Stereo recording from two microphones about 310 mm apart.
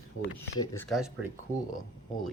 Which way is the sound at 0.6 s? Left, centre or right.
Centre.